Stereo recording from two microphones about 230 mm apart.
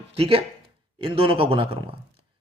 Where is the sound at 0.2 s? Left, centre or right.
Right.